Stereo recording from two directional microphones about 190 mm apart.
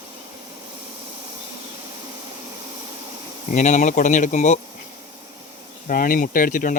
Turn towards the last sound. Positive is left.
turn(degrees=45)  # may be behind; listen again after turning